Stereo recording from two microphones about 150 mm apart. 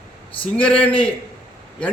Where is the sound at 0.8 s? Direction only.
35° left (ahead or behind).